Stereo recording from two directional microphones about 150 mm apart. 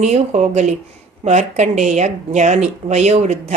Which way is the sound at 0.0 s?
50° right (ahead or behind).